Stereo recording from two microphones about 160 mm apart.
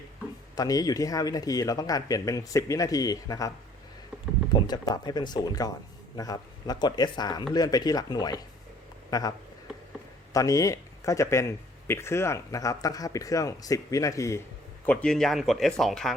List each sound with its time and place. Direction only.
0.5 s speech: 25° left (ahead or behind)
4.6 s speech: 25° left (ahead or behind)
10.3 s speech: 20° left (ahead or behind)
14.8 s speech: 5° left (ahead or behind)